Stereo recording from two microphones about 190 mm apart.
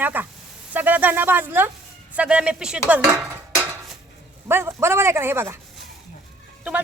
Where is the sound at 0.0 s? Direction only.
10° right (ahead or behind).